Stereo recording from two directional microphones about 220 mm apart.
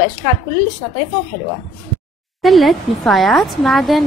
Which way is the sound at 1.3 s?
55° left (ahead or behind).